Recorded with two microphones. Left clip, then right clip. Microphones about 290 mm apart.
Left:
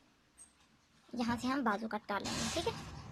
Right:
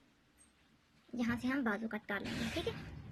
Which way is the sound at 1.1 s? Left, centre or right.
Centre.